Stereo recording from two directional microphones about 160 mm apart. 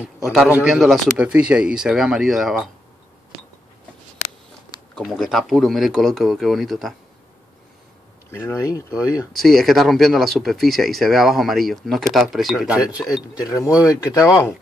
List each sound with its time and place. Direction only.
0.0 s speech: 5° right (ahead or behind)
4.9 s speech: centre (ahead or behind)
8.3 s speech: 20° left (ahead or behind)
9.3 s speech: centre (ahead or behind)
13.5 s speech: 20° left (ahead or behind)